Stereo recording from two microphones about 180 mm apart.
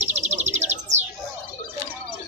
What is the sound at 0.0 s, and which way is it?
Bird, 40° right (ahead or behind).